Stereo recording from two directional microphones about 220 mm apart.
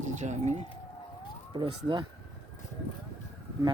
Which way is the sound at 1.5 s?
20° right (ahead or behind).